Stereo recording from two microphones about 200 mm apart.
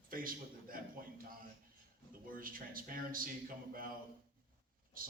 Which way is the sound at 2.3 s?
45° right (ahead or behind).